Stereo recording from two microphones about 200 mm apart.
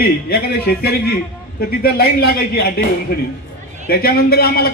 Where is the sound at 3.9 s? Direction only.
50° left (ahead or behind).